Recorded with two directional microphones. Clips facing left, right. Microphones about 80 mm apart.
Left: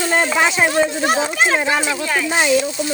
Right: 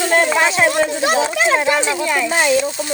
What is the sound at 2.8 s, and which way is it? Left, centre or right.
Speech, right.